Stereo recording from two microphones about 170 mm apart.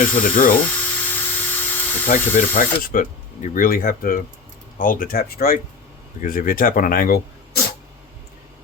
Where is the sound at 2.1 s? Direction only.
50° left (ahead or behind).